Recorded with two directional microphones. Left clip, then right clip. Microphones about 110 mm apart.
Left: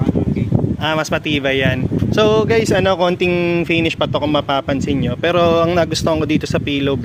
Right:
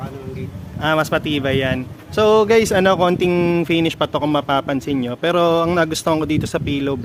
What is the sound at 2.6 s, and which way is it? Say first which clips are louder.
Speech: even; 15° right (ahead or behind).